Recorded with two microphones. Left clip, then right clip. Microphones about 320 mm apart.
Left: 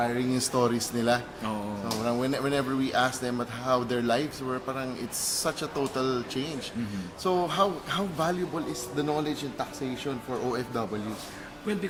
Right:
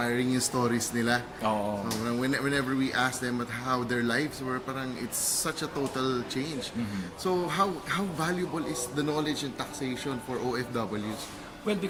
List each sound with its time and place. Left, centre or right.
0.0 s speech: centre
6.0 s speech: centre